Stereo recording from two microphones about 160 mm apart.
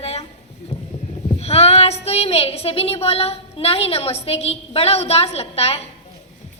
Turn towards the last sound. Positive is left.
turn(degrees=40)  # may be behind; listen again after turning